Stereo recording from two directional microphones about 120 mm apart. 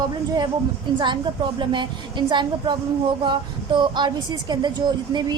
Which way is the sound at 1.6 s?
40° right (ahead or behind).